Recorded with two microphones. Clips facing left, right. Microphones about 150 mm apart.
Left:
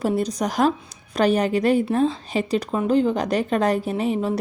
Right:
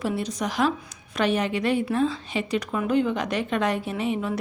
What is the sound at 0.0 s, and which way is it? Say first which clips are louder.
A woman's voice: left 5 dB; 40° left (ahead or behind).